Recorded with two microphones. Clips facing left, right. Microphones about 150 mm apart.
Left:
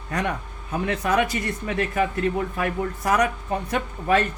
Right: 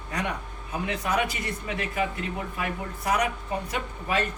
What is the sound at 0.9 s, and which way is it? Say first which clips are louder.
Speech: left 5 dB; 50° left (ahead or behind).